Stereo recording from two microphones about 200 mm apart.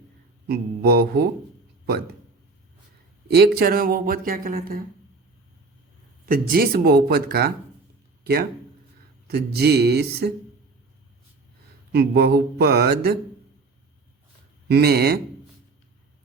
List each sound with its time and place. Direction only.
0.4 s speech: 50° right (ahead or behind)
3.2 s speech: 55° right (ahead or behind)
6.2 s speech: 45° right (ahead or behind)
9.2 s speech: 55° right (ahead or behind)
11.9 s speech: 55° right (ahead or behind)
14.7 s speech: 55° right (ahead or behind)